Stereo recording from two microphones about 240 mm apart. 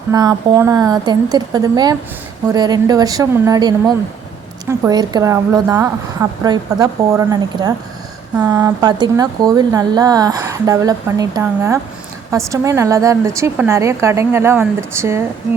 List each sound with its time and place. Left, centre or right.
0.1 s speech: centre